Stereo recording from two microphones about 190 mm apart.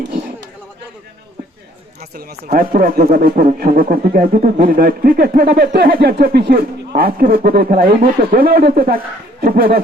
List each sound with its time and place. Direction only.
2.0 s a man's voice: 50° right (ahead or behind)